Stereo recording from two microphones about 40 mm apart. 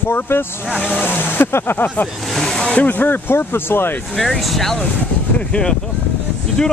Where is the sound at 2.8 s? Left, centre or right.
Left.